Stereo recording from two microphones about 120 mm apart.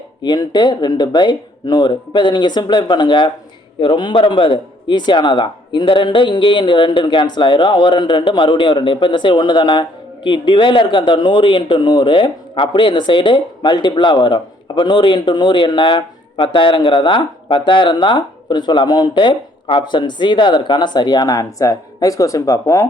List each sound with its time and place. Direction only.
0.2 s speech: 35° left (ahead or behind)